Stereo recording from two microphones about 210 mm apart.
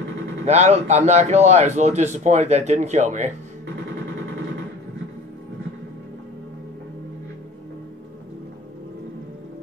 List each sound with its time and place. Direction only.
0.5 s speech: 30° right (ahead or behind)